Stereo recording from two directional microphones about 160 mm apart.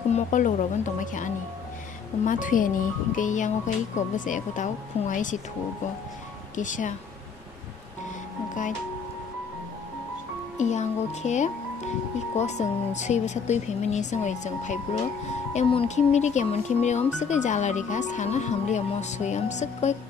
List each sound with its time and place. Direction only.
0.1 s speech: 50° left (ahead or behind)
6.5 s speech: 50° left (ahead or behind)
10.6 s speech: 45° left (ahead or behind)